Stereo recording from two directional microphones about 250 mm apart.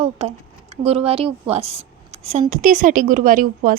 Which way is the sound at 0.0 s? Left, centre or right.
Right.